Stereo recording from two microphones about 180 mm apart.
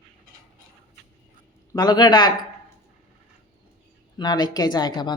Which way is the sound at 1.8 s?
25° left (ahead or behind).